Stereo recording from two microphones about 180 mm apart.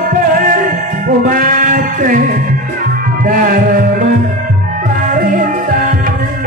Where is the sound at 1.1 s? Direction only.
50° right (ahead or behind).